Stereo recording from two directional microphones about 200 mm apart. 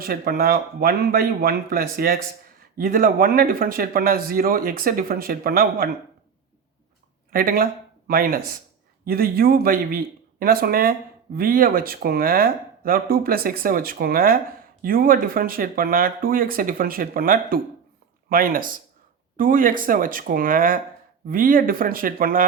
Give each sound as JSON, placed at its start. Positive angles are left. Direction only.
{"t": 0.0, "sound": "a man's voice", "side_deg": -50}
{"t": 7.3, "sound": "a man's voice", "side_deg": -45}